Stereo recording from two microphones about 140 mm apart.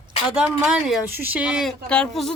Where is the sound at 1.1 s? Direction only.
15° right (ahead or behind); by 2.3 s 5° left (ahead or behind).